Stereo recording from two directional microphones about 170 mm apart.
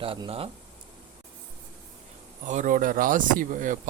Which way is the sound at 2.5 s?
50° right (ahead or behind).